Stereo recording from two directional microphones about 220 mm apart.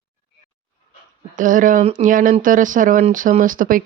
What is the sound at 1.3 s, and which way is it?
Speech, 35° right (ahead or behind).